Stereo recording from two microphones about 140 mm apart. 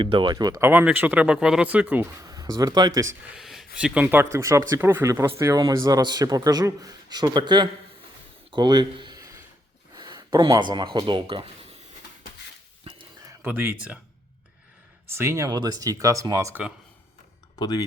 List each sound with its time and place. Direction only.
0.0 s speech: 35° right (ahead or behind)
0.6 s speech: 15° right (ahead or behind)
2.2 s speech: 25° right (ahead or behind)
3.3 s a sound: centre (ahead or behind)
3.8 s speech: 10° right (ahead or behind); by 9.1 s 35° right (ahead or behind)
9.1 s a sound: 20° right (ahead or behind)
9.9 s speech: 30° right (ahead or behind)
12.9 s a sound: 45° right (ahead or behind)
13.4 s speech: 15° right (ahead or behind)
15.0 s speech: 20° right (ahead or behind)
17.6 s speech: 30° left (ahead or behind)